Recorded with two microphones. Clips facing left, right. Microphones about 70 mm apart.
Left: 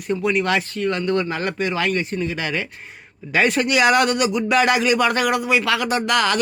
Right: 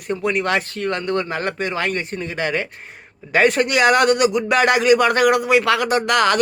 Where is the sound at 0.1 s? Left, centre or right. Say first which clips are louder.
Even; right.